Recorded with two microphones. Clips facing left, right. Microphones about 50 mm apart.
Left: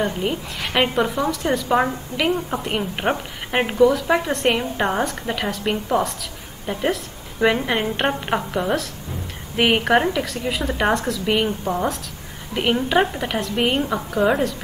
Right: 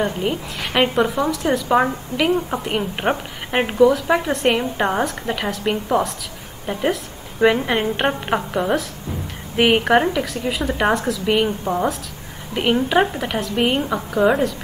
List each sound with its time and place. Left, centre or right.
0.0 s a woman's voice: centre